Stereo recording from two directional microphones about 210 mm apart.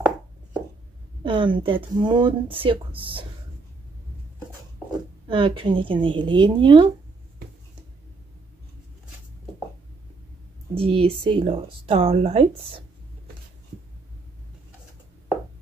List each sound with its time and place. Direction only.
1.2 s speech: 25° right (ahead or behind)
5.3 s speech: 25° right (ahead or behind)
10.7 s speech: 25° right (ahead or behind)